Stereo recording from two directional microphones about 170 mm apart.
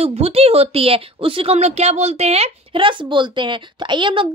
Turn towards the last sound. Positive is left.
turn(degrees=-30)  # may be behind; listen again after turning